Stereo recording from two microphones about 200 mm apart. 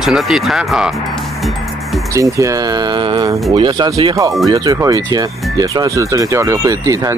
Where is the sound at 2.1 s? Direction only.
15° right (ahead or behind).